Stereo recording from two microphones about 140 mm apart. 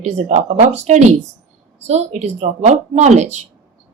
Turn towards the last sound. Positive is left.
turn(degrees=-55)  # may be behind; listen again after turning